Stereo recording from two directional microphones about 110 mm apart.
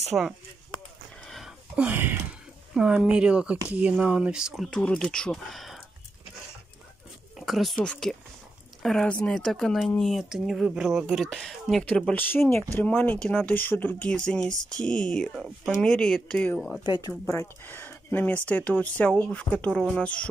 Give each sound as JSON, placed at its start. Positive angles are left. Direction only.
{"t": 0.1, "sound": "speech", "side_deg": -10}
{"t": 1.8, "sound": "speech", "side_deg": -15}
{"t": 2.7, "sound": "speech", "side_deg": -5}
{"t": 4.6, "sound": "speech", "side_deg": 10}
{"t": 7.3, "sound": "speech", "side_deg": 0}
{"t": 16.8, "sound": "speech", "side_deg": 40}
{"t": 17.3, "sound": "speech", "side_deg": 20}